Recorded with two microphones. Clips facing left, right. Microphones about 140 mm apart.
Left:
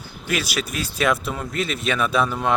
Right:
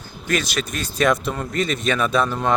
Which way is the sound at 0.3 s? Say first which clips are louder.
Right 2 dB; 5° left (ahead or behind).